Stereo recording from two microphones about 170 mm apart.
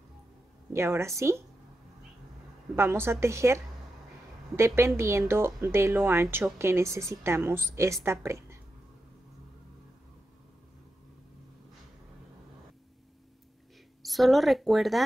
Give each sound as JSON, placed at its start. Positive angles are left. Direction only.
{"t": 0.7, "sound": "a woman's voice", "side_deg": -15}
{"t": 2.7, "sound": "a woman's voice", "side_deg": -15}
{"t": 14.0, "sound": "speech", "side_deg": 0}